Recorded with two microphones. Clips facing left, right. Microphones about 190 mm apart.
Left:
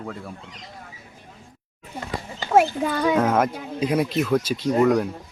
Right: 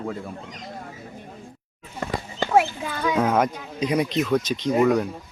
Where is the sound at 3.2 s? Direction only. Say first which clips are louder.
Left 1 dB; centre (ahead or behind).